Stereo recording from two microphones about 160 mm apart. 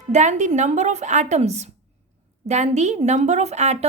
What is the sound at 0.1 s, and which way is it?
A woman's voice, 45° right (ahead or behind).